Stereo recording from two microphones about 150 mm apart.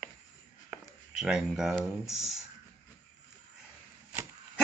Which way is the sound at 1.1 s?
5° right (ahead or behind).